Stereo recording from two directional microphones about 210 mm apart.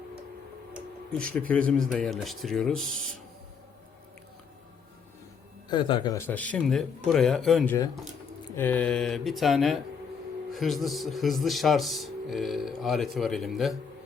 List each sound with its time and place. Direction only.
0.7 s a man's voice: 5° left (ahead or behind)
5.6 s a man's voice: 20° left (ahead or behind); by 13.7 s centre (ahead or behind)